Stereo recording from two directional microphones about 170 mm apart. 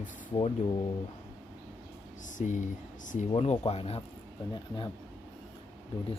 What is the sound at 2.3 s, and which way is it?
Speech, 45° left (ahead or behind).